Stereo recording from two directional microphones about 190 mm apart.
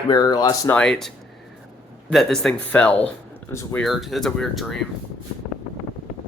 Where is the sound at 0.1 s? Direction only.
20° left (ahead or behind).